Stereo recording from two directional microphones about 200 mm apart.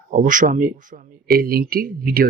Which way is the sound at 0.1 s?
40° right (ahead or behind).